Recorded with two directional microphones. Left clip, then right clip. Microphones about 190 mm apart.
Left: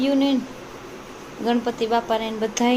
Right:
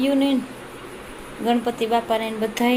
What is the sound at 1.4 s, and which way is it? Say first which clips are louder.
Speech: right 1 dB; 5° right (ahead or behind).